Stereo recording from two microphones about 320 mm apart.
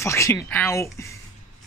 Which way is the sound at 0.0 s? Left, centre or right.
Centre.